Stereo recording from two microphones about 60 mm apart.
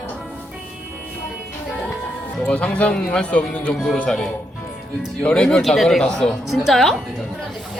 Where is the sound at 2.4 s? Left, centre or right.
Centre.